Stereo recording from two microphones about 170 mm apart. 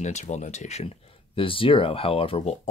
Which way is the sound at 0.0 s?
45° left (ahead or behind).